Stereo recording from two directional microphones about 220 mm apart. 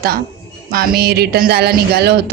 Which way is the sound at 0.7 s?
45° right (ahead or behind).